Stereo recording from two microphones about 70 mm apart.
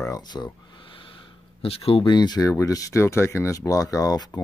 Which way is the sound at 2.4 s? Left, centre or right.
Left.